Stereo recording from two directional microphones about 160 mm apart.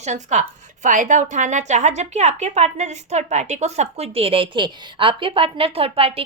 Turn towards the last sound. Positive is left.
turn(degrees=-35)  # may be behind; listen again after turning